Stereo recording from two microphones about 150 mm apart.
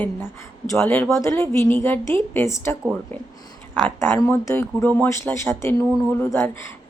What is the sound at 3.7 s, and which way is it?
A woman's voice, 15° left (ahead or behind).